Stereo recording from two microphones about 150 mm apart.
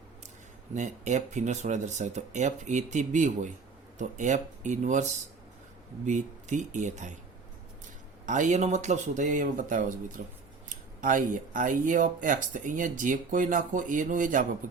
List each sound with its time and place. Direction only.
0.7 s speech: 50° right (ahead or behind)
8.3 s speech: 55° right (ahead or behind)